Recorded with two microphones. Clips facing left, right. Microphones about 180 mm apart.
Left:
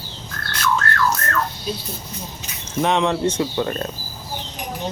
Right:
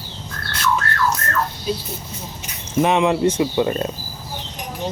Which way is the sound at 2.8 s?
10° right (ahead or behind).